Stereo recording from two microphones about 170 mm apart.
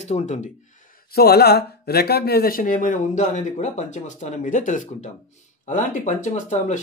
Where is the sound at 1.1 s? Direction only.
65° left (ahead or behind).